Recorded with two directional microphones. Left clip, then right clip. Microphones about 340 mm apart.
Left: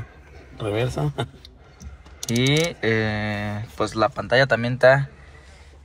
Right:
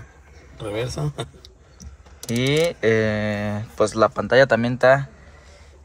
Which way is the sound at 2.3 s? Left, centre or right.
Centre.